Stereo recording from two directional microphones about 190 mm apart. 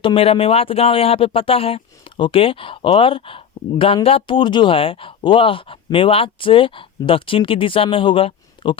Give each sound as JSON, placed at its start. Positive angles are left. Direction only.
{"t": 0.0, "sound": "speech", "side_deg": 30}